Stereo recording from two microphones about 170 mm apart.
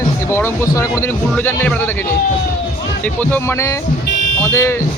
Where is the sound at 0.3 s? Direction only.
15° left (ahead or behind).